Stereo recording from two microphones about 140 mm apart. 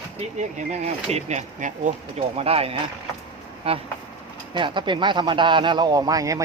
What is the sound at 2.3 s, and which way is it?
Speech, 45° right (ahead or behind).